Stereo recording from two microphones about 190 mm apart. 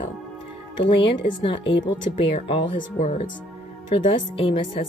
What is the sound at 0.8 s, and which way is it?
A woman's voice, 25° left (ahead or behind).